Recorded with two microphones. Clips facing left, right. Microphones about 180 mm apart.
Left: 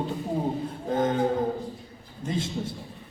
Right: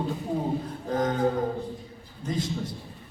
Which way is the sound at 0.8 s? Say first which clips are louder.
Left 2 dB; 25° left (ahead or behind).